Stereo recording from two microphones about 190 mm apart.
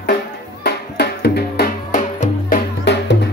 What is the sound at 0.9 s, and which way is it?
Music, 60° left (ahead or behind).